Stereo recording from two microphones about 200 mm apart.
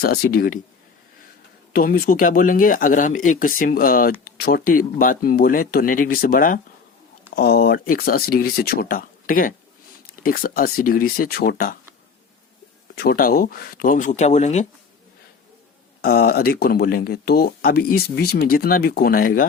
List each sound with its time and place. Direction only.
0.0 s speech: 50° left (ahead or behind)
1.7 s speech: 45° left (ahead or behind)
13.0 s speech: 45° left (ahead or behind)
16.0 s speech: 50° left (ahead or behind)